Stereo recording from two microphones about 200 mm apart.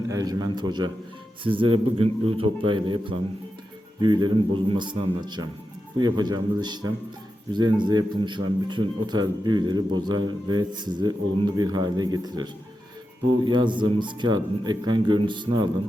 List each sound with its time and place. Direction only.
0.1 s speech: 20° right (ahead or behind)
4.0 s speech: 20° right (ahead or behind)